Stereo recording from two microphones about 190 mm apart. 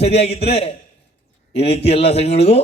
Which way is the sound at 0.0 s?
30° left (ahead or behind).